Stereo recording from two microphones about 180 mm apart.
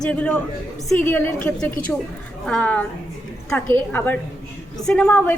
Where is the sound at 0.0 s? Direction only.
5° left (ahead or behind).